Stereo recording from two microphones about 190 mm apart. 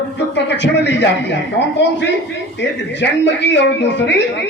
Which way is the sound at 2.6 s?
70° left (ahead or behind).